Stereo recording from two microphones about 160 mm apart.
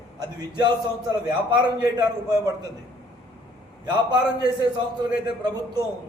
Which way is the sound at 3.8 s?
25° right (ahead or behind).